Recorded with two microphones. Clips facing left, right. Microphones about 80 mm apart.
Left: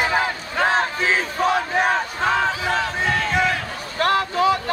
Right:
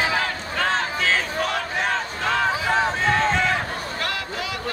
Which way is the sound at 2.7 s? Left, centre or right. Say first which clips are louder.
Right 1 dB; right.